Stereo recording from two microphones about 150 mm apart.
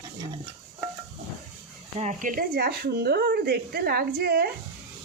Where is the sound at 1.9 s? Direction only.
55° right (ahead or behind); by 4.5 s 90° right.